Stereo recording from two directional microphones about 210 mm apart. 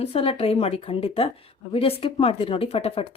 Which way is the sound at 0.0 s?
25° left (ahead or behind).